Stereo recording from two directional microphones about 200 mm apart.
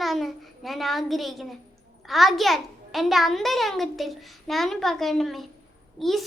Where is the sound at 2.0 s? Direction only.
Centre (ahead or behind).